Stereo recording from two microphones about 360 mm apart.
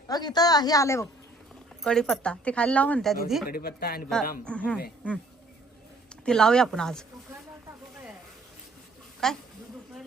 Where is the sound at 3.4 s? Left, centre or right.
Left.